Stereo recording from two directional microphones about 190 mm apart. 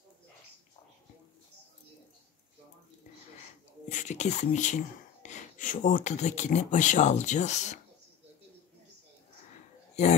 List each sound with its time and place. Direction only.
3.9 s speech: 40° left (ahead or behind)
10.0 s speech: 35° left (ahead or behind)